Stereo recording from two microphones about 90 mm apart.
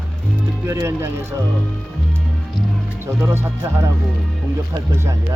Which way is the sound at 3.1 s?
30° right (ahead or behind).